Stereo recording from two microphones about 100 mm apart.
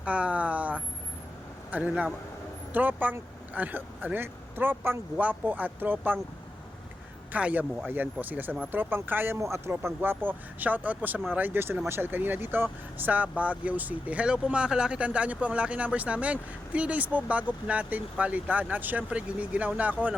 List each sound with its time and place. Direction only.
0.0 s speech: 15° right (ahead or behind)
7.3 s speech: 15° right (ahead or behind)